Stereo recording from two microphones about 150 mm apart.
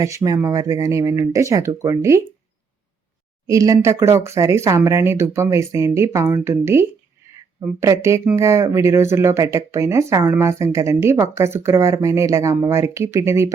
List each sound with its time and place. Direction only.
0.0 s speech: 20° right (ahead or behind)
3.4 s speech: 20° right (ahead or behind)